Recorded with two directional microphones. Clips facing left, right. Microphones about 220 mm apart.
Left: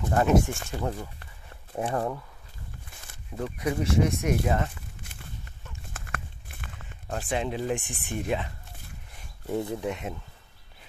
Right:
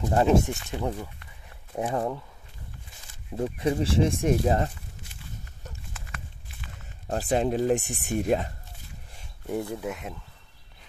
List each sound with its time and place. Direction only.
0.1 s speech: 25° right (ahead or behind)
0.7 s speech: 10° right (ahead or behind)
3.3 s speech: 25° right (ahead or behind)
5.9 s a sound: 55° left (ahead or behind)
7.1 s speech: 35° right (ahead or behind)
9.8 s speech: centre (ahead or behind)